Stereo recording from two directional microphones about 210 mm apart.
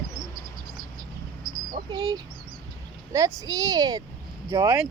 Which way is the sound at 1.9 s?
15° right (ahead or behind).